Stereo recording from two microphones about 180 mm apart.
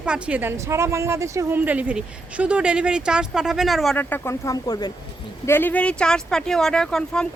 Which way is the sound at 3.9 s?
10° left (ahead or behind).